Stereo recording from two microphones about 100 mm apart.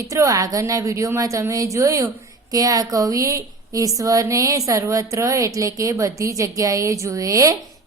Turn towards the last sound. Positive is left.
turn(degrees=-35)  # may be behind; listen again after turning